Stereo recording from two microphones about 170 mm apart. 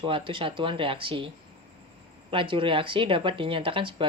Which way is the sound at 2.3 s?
30° right (ahead or behind).